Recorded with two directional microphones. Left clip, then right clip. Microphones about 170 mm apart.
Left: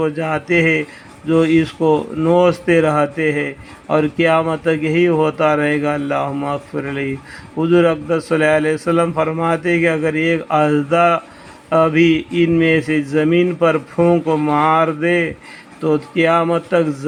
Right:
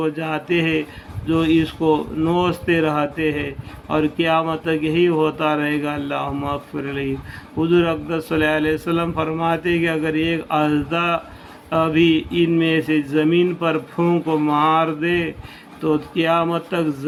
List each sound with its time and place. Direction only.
0.0 s speech: 35° left (ahead or behind)